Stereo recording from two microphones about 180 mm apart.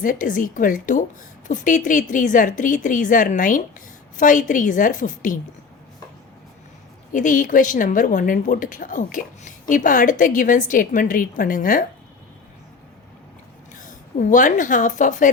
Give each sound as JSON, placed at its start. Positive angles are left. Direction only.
{"t": 0.0, "sound": "a woman's voice", "side_deg": 50}
{"t": 7.1, "sound": "a woman's voice", "side_deg": 45}
{"t": 13.7, "sound": "a woman's voice", "side_deg": 45}